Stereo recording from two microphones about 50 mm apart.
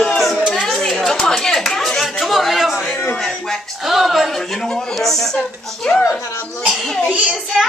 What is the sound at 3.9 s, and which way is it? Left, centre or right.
Speech, centre.